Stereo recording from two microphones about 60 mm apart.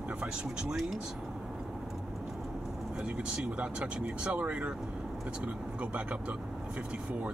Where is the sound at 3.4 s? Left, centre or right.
Right.